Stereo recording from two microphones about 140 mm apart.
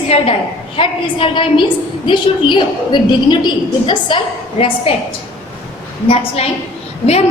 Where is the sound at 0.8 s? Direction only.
35° left (ahead or behind).